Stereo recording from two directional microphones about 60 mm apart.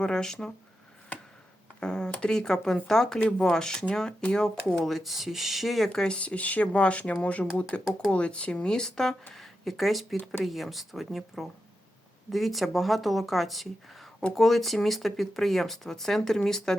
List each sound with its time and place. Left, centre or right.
0.0 s speech: centre
1.8 s speech: centre
5.9 s speech: centre